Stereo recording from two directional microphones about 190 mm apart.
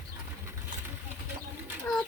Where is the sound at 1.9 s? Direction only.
10° left (ahead or behind).